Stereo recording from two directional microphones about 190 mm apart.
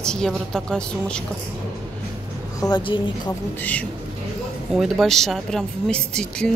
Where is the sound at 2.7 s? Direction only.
25° left (ahead or behind).